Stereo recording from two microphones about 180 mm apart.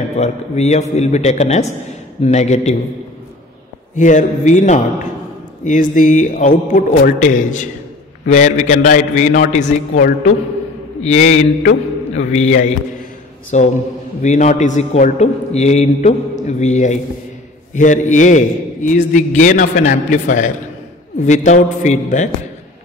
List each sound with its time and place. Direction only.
0.2 s a man's voice: 40° left (ahead or behind)
3.9 s a man's voice: 45° left (ahead or behind)